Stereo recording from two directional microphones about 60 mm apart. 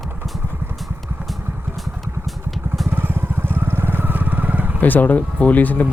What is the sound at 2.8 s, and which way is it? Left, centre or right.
Vehicle, right.